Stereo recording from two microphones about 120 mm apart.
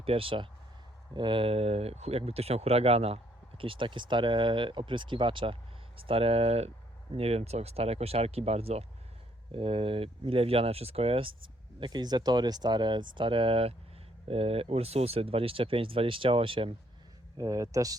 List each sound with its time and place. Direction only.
0.0 s speech: 50° right (ahead or behind)
3.6 s speech: 45° right (ahead or behind)
11.8 s speech: 35° right (ahead or behind)
17.3 s speech: 30° right (ahead or behind)